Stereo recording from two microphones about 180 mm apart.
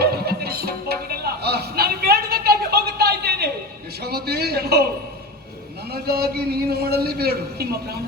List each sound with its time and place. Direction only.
0.0 s a sound: 60° right (ahead or behind)
4.0 s a man's voice: 60° right (ahead or behind)
5.9 s a man's voice: 60° right (ahead or behind)